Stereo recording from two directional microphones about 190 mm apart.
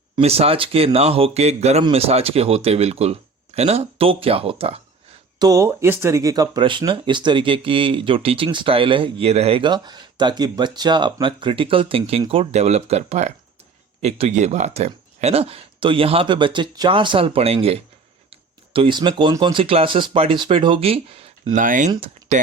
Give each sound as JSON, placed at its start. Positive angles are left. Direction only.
{"t": 0.2, "sound": "speech", "side_deg": -30}
{"t": 5.4, "sound": "speech", "side_deg": -15}
{"t": 21.6, "sound": "speech", "side_deg": -45}